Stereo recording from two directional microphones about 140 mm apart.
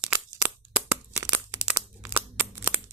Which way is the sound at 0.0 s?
10° right (ahead or behind).